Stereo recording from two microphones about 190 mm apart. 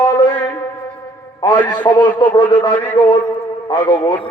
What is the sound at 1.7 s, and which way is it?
Speech, 25° left (ahead or behind).